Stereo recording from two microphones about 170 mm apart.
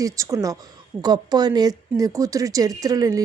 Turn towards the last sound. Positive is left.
turn(degrees=-20)  # may be behind; listen again after turning